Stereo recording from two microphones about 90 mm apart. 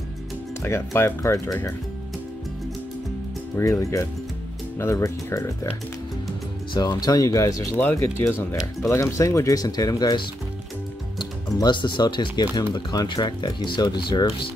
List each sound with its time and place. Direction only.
0.6 s speech: 30° left (ahead or behind)
3.8 s speech: 35° left (ahead or behind)
6.7 s speech: 50° left (ahead or behind)
7.9 s speech: 25° left (ahead or behind); by 14.2 s 60° left (ahead or behind)